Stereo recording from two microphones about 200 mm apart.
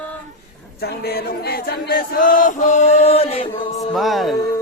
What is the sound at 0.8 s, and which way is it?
Chant, 50° left (ahead or behind).